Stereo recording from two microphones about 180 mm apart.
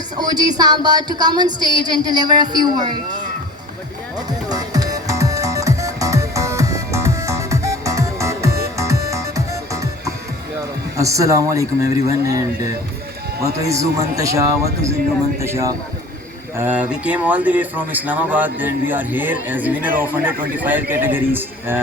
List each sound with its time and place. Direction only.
0.2 s speech: 20° right (ahead or behind)
4.3 s music: 20° right (ahead or behind)
10.9 s a man's voice: 15° right (ahead or behind)